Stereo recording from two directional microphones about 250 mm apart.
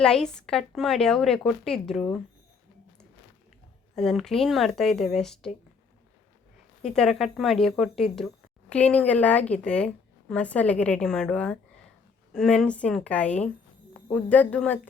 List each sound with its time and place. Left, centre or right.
0.0 s a woman's voice: centre
3.9 s a woman's voice: centre
6.9 s a woman's voice: centre